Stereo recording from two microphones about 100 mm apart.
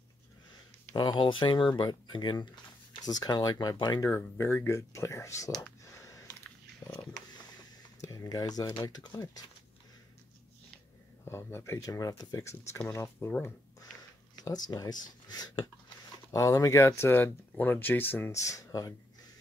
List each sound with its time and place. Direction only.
0.9 s speech: 50° left (ahead or behind)
1.7 s speech: 45° left (ahead or behind)
4.1 s speech: 20° left (ahead or behind)
5.9 s a sound: 30° left (ahead or behind)
6.9 s a sound: 45° left (ahead or behind)
8.0 s speech: 35° left (ahead or behind)
11.2 s speech: 25° left (ahead or behind)
14.3 s speech: 45° left (ahead or behind); by 18.4 s 20° left (ahead or behind)
18.4 s speech: 35° left (ahead or behind)